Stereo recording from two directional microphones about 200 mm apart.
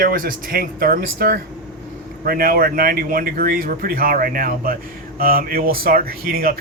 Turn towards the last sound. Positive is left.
turn(degrees=-50)  # may be behind; listen again after turning